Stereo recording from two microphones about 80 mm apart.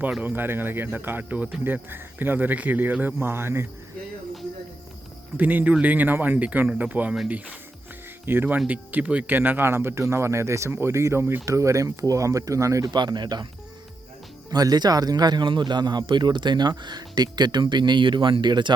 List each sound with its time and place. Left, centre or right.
0.2 s speech: right
5.4 s speech: centre; by 12.9 s right
12.9 s speech: right
14.5 s speech: right